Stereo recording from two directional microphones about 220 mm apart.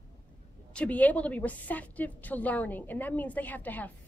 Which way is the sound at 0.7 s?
5° left (ahead or behind).